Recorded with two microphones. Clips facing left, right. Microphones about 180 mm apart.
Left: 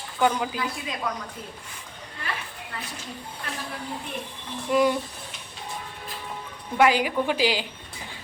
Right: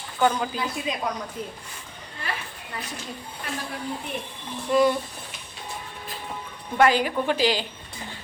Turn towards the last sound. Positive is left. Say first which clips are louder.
# right 1 dB
turn(degrees=10)  # may be behind; listen again after turning